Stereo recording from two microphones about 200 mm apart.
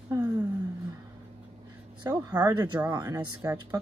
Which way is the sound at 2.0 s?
20° right (ahead or behind).